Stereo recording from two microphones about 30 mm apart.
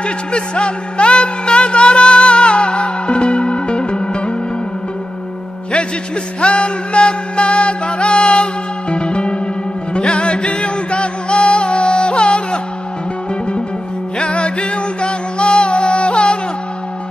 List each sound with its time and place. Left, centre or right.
0.0 s music: left
6.4 s music: left
14.1 s music: left